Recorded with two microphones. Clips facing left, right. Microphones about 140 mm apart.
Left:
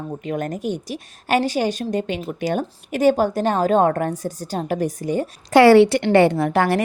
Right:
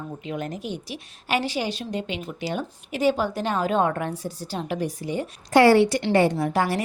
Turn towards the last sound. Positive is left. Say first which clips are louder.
# left 5 dB
turn(degrees=60)  # may be behind; listen again after turning